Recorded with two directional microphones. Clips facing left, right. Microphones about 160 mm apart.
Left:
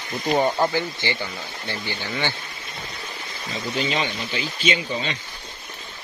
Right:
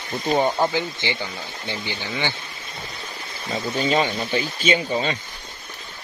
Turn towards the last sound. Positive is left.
turn(degrees=-45)  # may be behind; listen again after turning